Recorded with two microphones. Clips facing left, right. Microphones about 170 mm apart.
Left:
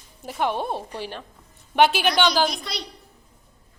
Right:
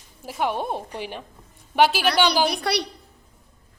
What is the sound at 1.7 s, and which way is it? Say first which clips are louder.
Speech: left 1 dB; 5° right (ahead or behind).